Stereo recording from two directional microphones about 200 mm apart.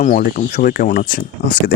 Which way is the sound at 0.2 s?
45° left (ahead or behind).